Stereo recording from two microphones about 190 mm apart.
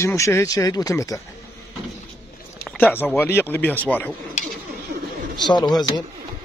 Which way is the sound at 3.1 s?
10° left (ahead or behind).